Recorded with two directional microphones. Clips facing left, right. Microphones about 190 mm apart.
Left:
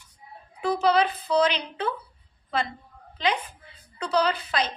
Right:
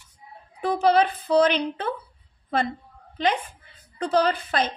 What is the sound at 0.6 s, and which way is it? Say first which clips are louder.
A woman's voice: right 2 dB; 50° right (ahead or behind).